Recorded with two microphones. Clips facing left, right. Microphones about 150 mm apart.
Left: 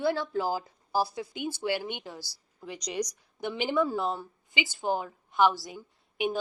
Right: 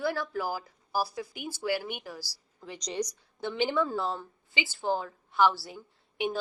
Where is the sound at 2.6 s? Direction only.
10° left (ahead or behind).